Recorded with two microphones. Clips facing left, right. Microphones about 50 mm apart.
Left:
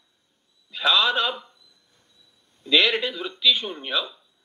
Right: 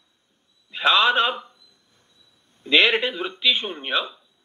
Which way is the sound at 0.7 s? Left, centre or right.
Right.